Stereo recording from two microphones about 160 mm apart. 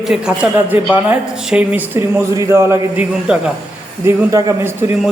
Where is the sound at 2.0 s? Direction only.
20° right (ahead or behind).